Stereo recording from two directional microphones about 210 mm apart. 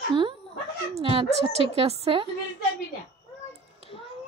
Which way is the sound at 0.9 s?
25° right (ahead or behind).